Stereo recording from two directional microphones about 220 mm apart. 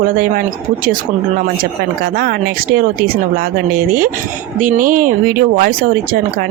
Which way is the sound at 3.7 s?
40° right (ahead or behind).